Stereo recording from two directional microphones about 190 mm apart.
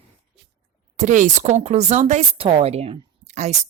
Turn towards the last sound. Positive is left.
turn(degrees=-35)  # may be behind; listen again after turning